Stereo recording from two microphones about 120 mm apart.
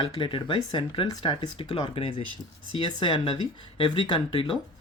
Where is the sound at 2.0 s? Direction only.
50° left (ahead or behind).